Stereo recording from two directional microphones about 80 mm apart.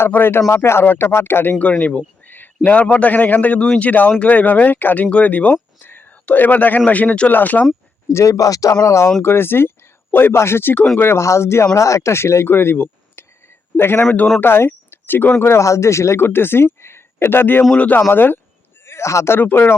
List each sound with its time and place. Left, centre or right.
0.0 s speech: left
1.8 s speech: centre
8.1 s speech: left
9.2 s speech: left
18.9 s speech: left
19.4 s speech: left